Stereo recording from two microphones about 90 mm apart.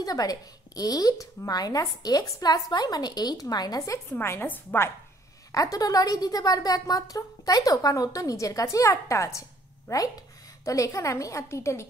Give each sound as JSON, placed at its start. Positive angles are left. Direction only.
{"t": 0.0, "sound": "speech", "side_deg": 45}
{"t": 4.1, "sound": "a woman's voice", "side_deg": 25}
{"t": 5.5, "sound": "a woman's voice", "side_deg": 40}